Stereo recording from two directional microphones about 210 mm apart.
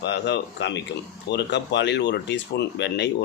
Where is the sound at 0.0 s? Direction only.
55° left (ahead or behind).